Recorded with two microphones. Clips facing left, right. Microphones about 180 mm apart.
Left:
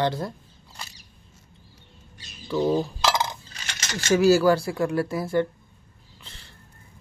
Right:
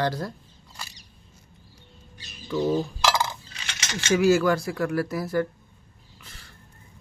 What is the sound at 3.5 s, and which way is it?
Speech, 45° left (ahead or behind).